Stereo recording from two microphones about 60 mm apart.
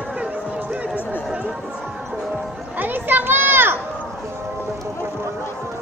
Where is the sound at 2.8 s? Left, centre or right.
Right.